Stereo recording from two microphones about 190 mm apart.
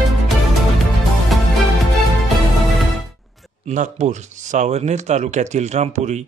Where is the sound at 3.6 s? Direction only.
40° right (ahead or behind).